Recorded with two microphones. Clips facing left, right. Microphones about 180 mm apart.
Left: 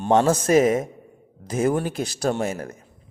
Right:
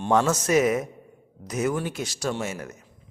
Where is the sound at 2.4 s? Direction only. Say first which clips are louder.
Left 5 dB; 35° left (ahead or behind).